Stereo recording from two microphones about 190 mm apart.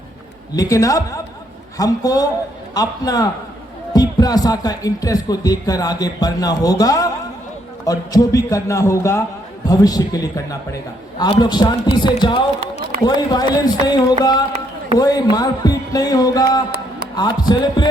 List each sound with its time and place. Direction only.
0.5 s a man's voice: 15° left (ahead or behind)